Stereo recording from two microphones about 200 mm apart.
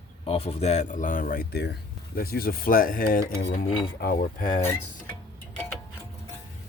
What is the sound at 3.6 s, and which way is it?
Speech, 25° left (ahead or behind).